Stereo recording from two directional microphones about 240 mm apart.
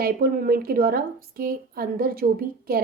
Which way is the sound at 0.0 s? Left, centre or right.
Right.